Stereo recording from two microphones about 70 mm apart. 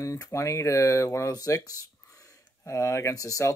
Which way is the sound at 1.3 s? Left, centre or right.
Left.